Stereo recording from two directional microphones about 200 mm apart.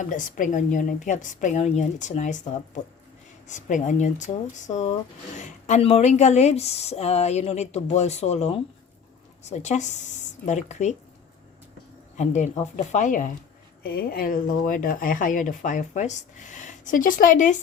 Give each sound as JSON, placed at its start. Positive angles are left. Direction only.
{"t": 0.0, "sound": "speech", "side_deg": 40}
{"t": 3.4, "sound": "speech", "side_deg": 40}
{"t": 12.1, "sound": "speech", "side_deg": 35}